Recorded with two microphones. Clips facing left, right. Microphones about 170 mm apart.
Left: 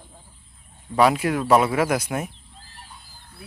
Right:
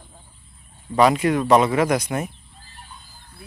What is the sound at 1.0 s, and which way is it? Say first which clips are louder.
Speech: right 2 dB; 5° left (ahead or behind).